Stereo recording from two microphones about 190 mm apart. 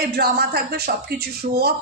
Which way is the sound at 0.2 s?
55° right (ahead or behind).